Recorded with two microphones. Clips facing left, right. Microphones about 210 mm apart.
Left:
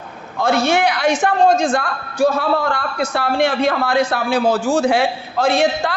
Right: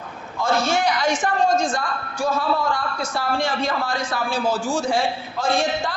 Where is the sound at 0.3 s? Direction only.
65° left (ahead or behind).